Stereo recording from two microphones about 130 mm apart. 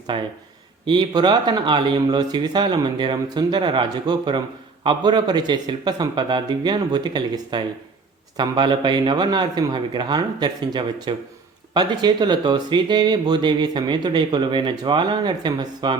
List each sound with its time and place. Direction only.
0.1 s speech: 40° right (ahead or behind)